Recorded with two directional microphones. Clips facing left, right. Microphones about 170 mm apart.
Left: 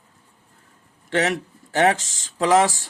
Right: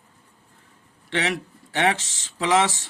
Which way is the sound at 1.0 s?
45° left (ahead or behind).